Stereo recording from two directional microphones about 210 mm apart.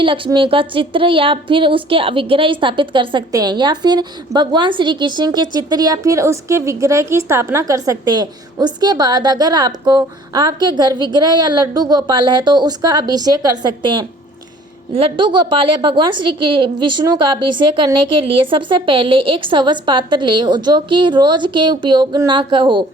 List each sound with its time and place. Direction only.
0.0 s a woman's voice: 25° right (ahead or behind)